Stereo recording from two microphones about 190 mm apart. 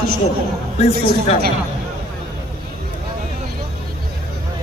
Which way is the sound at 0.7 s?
35° left (ahead or behind).